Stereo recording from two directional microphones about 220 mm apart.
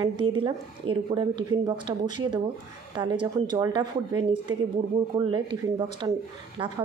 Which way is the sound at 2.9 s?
20° right (ahead or behind).